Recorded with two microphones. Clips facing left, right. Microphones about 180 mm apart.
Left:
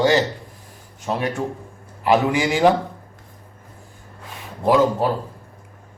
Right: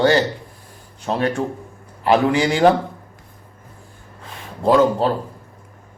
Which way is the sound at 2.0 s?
15° left (ahead or behind).